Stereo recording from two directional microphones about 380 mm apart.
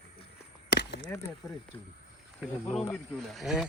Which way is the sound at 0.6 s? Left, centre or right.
Left.